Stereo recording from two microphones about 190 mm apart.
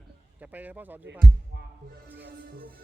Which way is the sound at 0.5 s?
10° right (ahead or behind).